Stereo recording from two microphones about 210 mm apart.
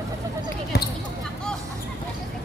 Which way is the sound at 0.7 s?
50° left (ahead or behind).